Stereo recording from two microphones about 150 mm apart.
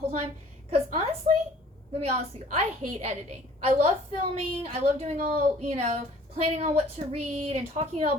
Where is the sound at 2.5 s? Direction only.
50° right (ahead or behind).